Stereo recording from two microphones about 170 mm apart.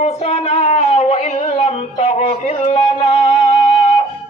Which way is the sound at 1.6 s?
35° left (ahead or behind).